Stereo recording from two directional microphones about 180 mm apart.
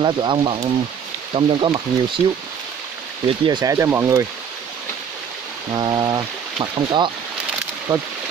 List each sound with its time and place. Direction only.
0.0 s speech: 25° right (ahead or behind)
3.3 s speech: 25° right (ahead or behind)
5.7 s speech: 25° right (ahead or behind)